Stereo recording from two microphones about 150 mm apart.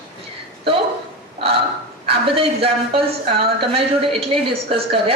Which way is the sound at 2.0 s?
40° right (ahead or behind).